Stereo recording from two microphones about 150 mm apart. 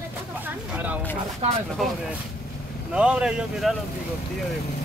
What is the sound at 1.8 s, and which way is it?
Speech, centre (ahead or behind).